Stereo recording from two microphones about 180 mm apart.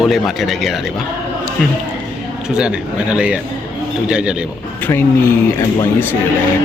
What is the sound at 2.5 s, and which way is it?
Speech, 5° right (ahead or behind).